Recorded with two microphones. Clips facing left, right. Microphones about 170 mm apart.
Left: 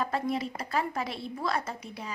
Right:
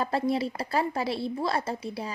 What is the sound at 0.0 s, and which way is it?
Speech, 30° right (ahead or behind).